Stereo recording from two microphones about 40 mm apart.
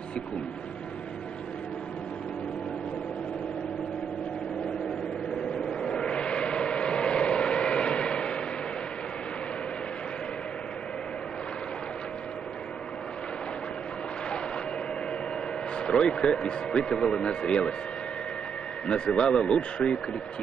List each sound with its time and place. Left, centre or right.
5.7 s vehicle: left
15.7 s speech: left
19.1 s speech: left